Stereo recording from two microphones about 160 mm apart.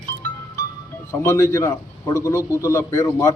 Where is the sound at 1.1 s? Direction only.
15° left (ahead or behind).